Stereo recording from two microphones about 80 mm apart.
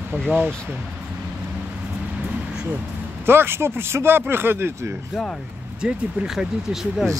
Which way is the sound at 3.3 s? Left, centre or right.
Right.